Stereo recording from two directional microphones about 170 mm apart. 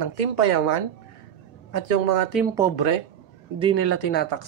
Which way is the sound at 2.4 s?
15° right (ahead or behind).